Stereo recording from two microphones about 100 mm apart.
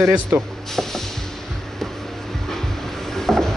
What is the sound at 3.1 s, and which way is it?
Mechanisms, 5° left (ahead or behind).